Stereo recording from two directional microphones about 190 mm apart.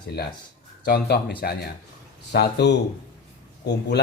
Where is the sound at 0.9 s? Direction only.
55° left (ahead or behind).